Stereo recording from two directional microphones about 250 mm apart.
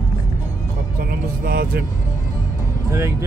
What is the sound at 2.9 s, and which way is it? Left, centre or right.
Music, centre.